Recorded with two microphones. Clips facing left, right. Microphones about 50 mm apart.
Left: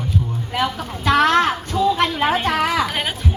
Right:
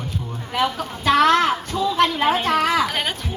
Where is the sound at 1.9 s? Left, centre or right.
Centre.